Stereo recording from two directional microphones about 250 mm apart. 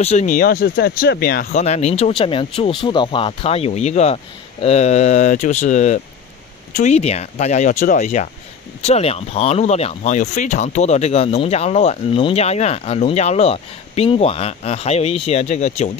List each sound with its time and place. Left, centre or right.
0.0 s speech: left
1.6 s speech: left